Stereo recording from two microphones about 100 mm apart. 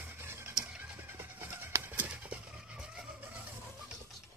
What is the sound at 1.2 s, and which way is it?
Bird, 25° right (ahead or behind).